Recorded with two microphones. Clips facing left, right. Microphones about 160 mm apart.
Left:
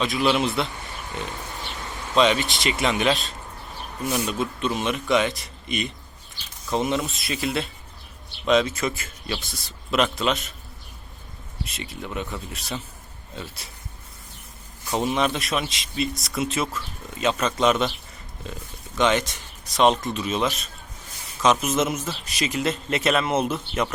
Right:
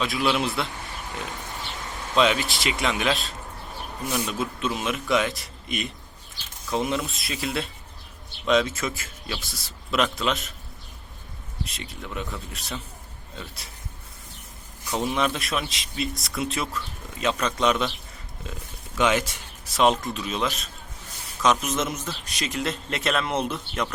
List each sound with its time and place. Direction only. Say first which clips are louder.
0.0 s speech: left 2 dB; centre (ahead or behind)
2.1 s speech: left 2 dB; centre (ahead or behind)
11.6 s speech: left 2 dB; centre (ahead or behind)
14.9 s speech: left 2 dB; centre (ahead or behind)